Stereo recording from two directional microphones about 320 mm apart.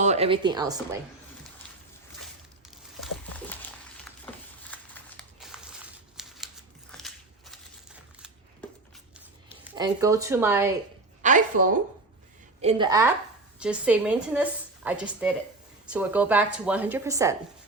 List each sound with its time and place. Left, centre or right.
0.0 s a woman's voice: centre
2.6 s a sound: centre
4.7 s a sound: centre
6.1 s typewriter: centre
6.9 s biting: centre
9.7 s speech: centre
11.2 s a woman's voice: right
12.6 s a woman's voice: centre